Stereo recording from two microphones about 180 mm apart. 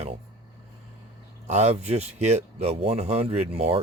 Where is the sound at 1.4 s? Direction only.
35° right (ahead or behind).